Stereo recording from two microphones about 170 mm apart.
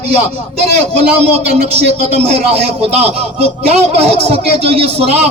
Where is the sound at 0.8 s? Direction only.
40° right (ahead or behind).